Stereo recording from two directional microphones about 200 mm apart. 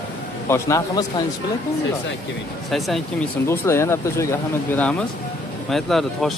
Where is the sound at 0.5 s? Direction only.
15° left (ahead or behind).